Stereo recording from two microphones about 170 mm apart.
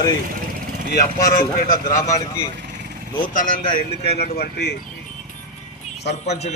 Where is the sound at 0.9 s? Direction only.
60° left (ahead or behind).